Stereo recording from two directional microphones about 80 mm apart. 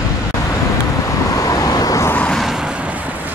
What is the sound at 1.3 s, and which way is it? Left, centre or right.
Vehicle, left.